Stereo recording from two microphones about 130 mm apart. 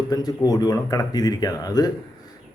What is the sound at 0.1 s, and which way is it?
Speech, 30° left (ahead or behind).